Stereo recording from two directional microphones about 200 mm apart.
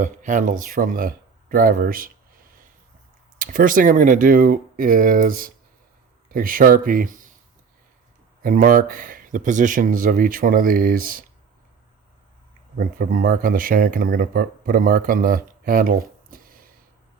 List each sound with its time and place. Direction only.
0.0 s speech: 40° right (ahead or behind)
3.3 s speech: 45° right (ahead or behind)
8.4 s speech: 45° right (ahead or behind)
12.7 s speech: 45° right (ahead or behind)